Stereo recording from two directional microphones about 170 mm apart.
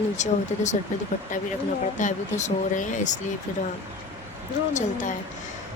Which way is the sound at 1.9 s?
45° left (ahead or behind).